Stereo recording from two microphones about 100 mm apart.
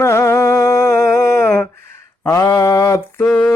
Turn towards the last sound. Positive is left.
turn(degrees=5)  # may be behind; listen again after turning